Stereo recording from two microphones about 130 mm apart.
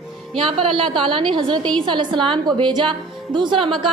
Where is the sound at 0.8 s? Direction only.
40° right (ahead or behind).